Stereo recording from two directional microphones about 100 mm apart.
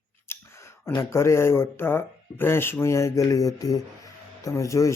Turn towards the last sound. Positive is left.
turn(degrees=30)  # may be behind; listen again after turning